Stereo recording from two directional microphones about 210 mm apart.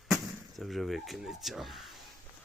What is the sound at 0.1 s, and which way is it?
Speech, centre (ahead or behind).